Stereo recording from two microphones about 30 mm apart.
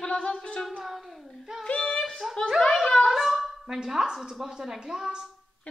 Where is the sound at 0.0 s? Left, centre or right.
Left.